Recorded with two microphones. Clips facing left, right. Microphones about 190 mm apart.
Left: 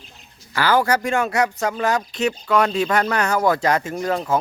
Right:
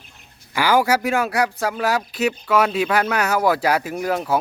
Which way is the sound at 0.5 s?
10° right (ahead or behind).